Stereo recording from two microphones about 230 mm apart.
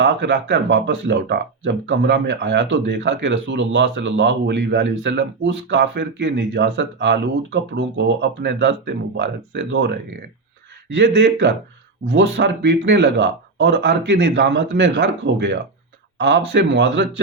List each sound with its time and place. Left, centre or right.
0.0 s speech: right